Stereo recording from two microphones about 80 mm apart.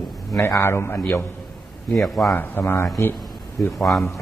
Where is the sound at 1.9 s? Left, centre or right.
Centre.